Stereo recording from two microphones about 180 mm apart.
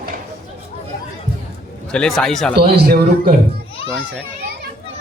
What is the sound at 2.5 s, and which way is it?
Speech, 60° right (ahead or behind).